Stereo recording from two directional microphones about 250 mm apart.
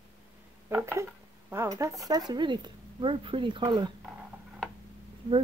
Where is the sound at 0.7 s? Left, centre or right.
Centre.